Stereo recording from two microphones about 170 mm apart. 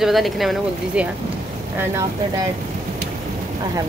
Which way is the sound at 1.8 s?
20° right (ahead or behind).